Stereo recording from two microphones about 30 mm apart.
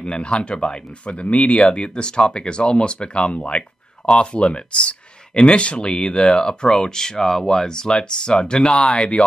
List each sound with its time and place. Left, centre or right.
0.0 s speech: left
1.0 s speech: left